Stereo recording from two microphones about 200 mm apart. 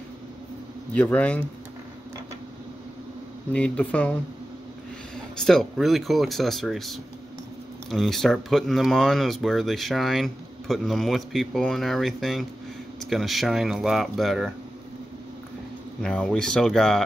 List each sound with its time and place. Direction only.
0.9 s speech: 5° left (ahead or behind)
3.5 s speech: 5° left (ahead or behind)
16.0 s speech: 5° left (ahead or behind)